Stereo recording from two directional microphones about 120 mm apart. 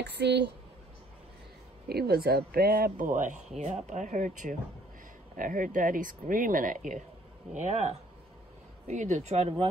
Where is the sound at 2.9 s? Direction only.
90° right.